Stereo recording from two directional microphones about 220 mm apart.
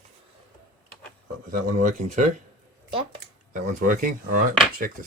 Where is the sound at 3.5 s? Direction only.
40° right (ahead or behind).